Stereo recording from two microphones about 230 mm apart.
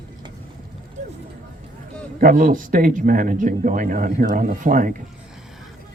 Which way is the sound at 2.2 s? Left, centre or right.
Right.